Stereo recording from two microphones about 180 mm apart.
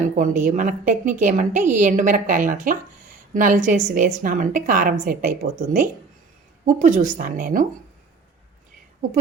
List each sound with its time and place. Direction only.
0.0 s a woman's voice: 45° right (ahead or behind)